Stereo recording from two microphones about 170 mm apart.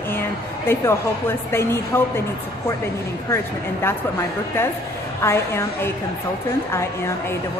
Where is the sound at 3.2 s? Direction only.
15° left (ahead or behind).